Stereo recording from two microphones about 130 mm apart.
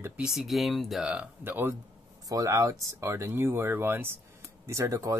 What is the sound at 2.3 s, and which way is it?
Speech, 25° right (ahead or behind).